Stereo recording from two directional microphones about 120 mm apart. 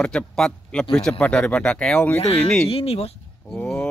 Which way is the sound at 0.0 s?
5° left (ahead or behind).